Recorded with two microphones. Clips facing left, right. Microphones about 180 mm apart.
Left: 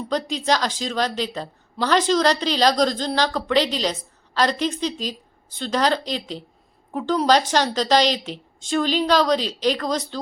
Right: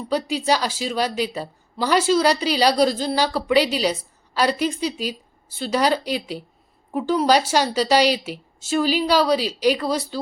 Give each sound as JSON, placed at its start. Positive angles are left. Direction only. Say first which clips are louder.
{"t": 0.1, "sound": "a woman's voice", "louder": "right 2 dB", "side_deg": -10}